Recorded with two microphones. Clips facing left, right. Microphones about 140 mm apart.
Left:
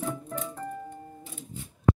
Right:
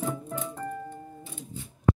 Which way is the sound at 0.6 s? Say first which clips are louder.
Right 2 dB; 5° left (ahead or behind).